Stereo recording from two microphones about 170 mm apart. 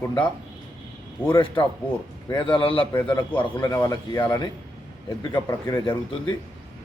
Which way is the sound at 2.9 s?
10° left (ahead or behind).